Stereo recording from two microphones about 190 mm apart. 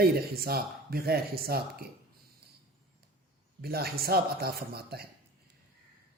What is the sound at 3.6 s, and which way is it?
Speech, 55° right (ahead or behind).